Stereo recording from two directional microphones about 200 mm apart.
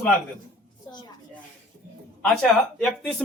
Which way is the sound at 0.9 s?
20° left (ahead or behind).